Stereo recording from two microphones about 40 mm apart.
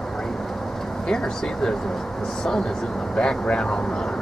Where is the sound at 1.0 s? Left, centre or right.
Centre.